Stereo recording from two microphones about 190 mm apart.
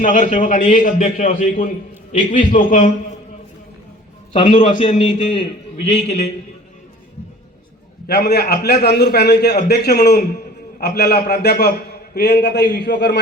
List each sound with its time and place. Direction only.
0.0 s a man's voice: 40° left (ahead or behind)
4.3 s a man's voice: 30° left (ahead or behind)
4.5 s a man's voice: 45° left (ahead or behind)
8.0 s a man's voice: 60° left (ahead or behind)